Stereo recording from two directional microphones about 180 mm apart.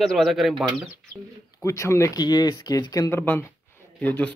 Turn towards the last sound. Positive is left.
turn(degrees=10)  # may be behind; listen again after turning